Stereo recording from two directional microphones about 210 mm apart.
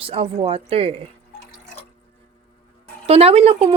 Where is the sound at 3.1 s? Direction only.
30° right (ahead or behind).